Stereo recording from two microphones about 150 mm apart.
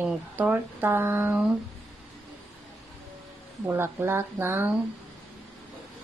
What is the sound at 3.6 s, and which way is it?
Speech, 15° right (ahead or behind).